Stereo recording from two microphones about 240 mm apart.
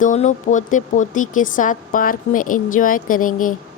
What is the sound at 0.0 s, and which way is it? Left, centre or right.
A woman's voice, left.